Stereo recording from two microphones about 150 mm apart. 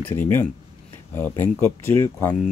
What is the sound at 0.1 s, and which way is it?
Speech, 15° left (ahead or behind).